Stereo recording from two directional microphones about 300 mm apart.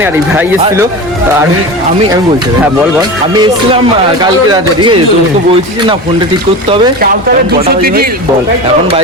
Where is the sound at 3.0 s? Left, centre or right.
Centre.